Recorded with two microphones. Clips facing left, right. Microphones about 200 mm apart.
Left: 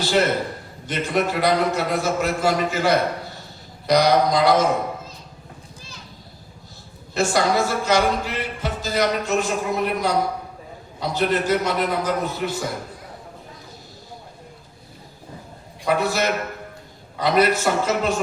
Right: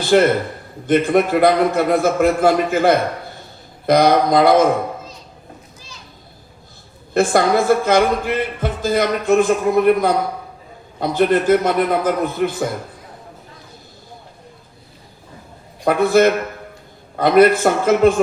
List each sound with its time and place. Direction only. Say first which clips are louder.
0.0 s speech: right 6 dB; 55° right (ahead or behind)
7.1 s speech: right 5 dB; 55° right (ahead or behind)
15.8 s speech: right 8 dB; 55° right (ahead or behind)